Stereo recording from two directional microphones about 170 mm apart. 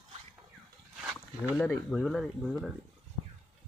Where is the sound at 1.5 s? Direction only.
5° left (ahead or behind).